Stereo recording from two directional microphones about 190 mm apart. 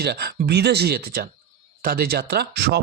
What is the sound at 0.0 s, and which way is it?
Speech, 60° right (ahead or behind).